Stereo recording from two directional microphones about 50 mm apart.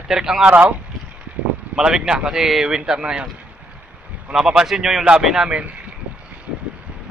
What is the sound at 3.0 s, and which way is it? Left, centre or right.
Speech, right.